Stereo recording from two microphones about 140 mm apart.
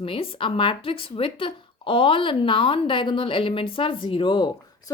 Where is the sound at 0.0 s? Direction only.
40° left (ahead or behind).